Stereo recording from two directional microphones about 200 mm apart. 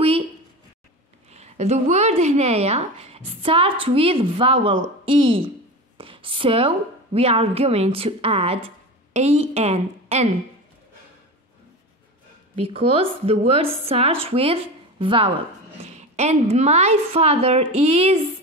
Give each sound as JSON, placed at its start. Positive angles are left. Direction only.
{"t": 1.3, "sound": "a woman's voice", "side_deg": -35}
{"t": 5.9, "sound": "a sound", "side_deg": -25}
{"t": 7.2, "sound": "a woman's voice", "side_deg": -30}
{"t": 12.5, "sound": "a woman's voice", "side_deg": -30}